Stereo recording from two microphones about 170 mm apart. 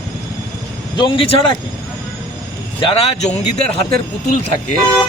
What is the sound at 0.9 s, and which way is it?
Speech, 30° left (ahead or behind).